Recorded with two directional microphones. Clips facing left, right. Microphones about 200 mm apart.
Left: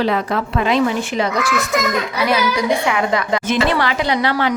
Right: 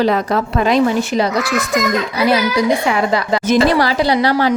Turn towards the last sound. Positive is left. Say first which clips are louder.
# right 4 dB
turn(degrees=-35)  # may be behind; listen again after turning